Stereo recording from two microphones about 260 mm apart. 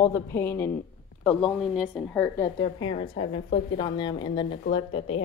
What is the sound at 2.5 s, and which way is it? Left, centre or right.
A woman's voice, centre.